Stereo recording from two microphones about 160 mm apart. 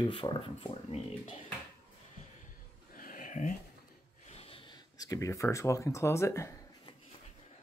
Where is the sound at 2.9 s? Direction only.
60° left (ahead or behind).